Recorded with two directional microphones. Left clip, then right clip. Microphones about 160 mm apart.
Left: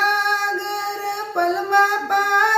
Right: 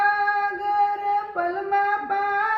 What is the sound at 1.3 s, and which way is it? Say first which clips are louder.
Female singing: left 6 dB; 20° left (ahead or behind).